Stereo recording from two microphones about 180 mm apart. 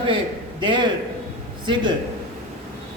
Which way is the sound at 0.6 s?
25° right (ahead or behind).